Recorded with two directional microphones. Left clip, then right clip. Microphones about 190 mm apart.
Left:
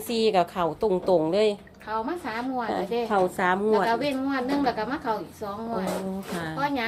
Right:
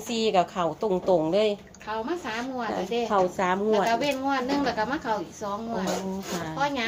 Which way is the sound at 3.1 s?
35° left (ahead or behind).